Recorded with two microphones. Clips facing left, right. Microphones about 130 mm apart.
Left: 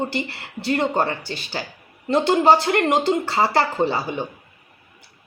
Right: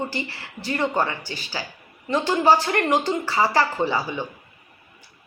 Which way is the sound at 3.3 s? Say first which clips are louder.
Left 1 dB; 25° left (ahead or behind).